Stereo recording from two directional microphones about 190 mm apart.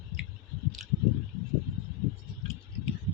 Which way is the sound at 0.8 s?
Centre (ahead or behind).